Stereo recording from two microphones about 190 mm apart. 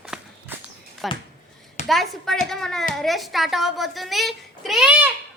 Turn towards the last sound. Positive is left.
turn(degrees=-5)  # may be behind; listen again after turning